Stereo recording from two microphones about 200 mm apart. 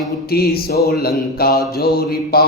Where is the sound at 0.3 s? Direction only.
50° left (ahead or behind).